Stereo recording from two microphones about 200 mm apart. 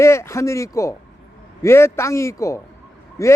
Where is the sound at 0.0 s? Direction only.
15° left (ahead or behind).